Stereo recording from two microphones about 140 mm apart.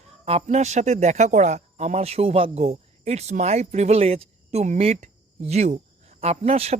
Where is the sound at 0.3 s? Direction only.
50° right (ahead or behind).